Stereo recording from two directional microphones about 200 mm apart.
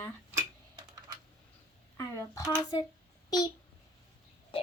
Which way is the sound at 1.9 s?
15° left (ahead or behind).